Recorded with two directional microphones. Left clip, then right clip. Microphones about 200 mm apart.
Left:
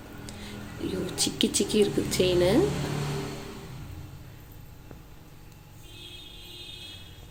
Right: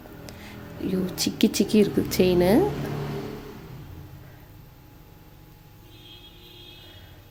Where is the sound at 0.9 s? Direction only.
50° right (ahead or behind).